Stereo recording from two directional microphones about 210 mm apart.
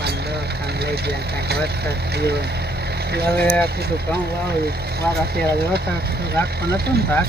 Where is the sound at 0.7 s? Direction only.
50° right (ahead or behind).